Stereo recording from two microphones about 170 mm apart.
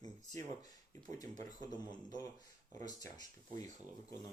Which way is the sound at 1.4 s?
25° left (ahead or behind).